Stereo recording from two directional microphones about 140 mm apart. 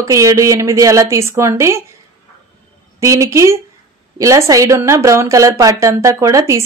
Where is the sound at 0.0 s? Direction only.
25° right (ahead or behind).